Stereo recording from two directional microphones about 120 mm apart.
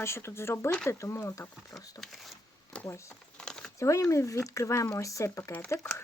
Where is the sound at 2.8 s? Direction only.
25° left (ahead or behind).